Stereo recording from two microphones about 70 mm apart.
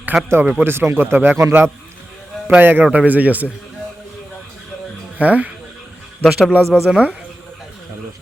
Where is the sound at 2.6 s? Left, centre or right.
Right.